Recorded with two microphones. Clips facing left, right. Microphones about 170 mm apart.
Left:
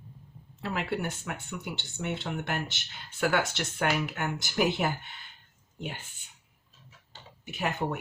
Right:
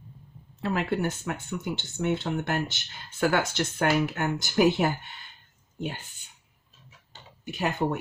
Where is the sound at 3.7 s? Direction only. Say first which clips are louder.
Right 4 dB; 40° right (ahead or behind).